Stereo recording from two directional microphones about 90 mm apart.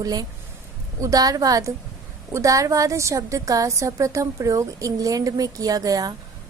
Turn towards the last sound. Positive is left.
turn(degrees=-45)  # may be behind; listen again after turning